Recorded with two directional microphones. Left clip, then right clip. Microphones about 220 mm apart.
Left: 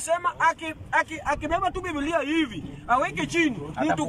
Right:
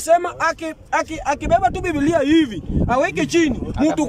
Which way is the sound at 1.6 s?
50° right (ahead or behind).